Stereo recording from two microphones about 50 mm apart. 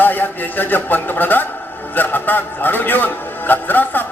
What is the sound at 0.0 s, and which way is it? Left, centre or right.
A man's voice, left.